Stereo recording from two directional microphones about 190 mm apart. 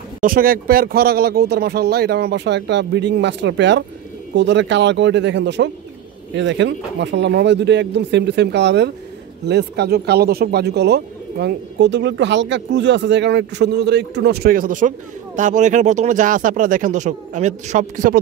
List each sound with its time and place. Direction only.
0.2 s speech: 50° right (ahead or behind)